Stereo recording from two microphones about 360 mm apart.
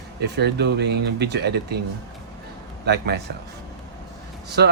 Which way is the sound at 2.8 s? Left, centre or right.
Right.